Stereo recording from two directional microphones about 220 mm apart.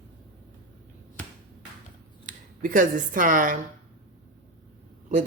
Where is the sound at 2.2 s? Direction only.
35° right (ahead or behind).